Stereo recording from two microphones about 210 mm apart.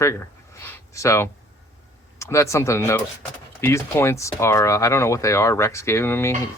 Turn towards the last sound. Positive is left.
turn(degrees=10)  # may be behind; listen again after turning